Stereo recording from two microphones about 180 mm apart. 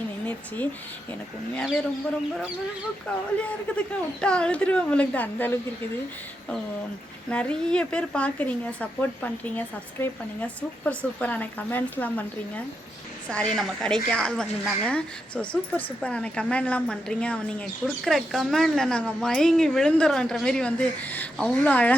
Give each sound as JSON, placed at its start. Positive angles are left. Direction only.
{"t": 0.3, "sound": "speech", "side_deg": 10}
{"t": 3.4, "sound": "speech", "side_deg": 5}
{"t": 7.3, "sound": "speech", "side_deg": 5}